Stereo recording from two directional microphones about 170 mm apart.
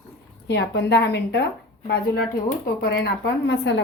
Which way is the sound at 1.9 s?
65° left (ahead or behind).